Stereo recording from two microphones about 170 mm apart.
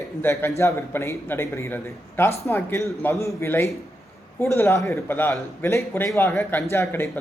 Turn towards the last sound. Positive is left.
turn(degrees=15)  # may be behind; listen again after turning